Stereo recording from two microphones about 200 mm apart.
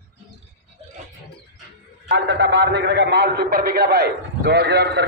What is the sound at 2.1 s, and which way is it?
A man's voice, 60° right (ahead or behind).